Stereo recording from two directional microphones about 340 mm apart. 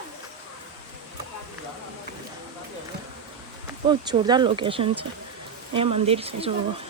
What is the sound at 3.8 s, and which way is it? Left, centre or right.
Speech, centre.